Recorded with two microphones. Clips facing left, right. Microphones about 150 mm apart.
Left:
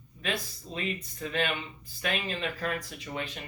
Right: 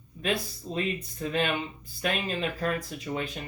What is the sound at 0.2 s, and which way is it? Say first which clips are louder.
Speech: right 4 dB; 40° right (ahead or behind).